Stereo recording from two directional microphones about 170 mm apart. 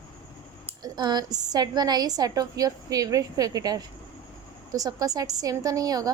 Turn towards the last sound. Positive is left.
turn(degrees=-20)  # may be behind; listen again after turning